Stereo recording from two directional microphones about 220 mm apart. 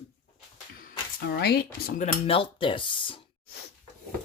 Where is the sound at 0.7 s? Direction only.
40° left (ahead or behind); by 3.2 s 25° left (ahead or behind).